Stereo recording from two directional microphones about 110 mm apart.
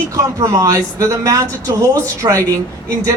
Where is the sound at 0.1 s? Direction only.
30° right (ahead or behind).